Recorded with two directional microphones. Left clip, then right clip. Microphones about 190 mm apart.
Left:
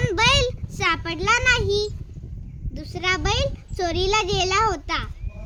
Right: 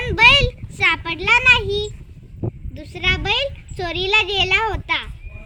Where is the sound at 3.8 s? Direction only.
45° left (ahead or behind).